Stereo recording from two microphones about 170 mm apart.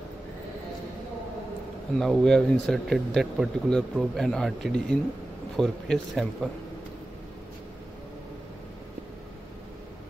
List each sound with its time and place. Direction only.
2.0 s speech: centre (ahead or behind)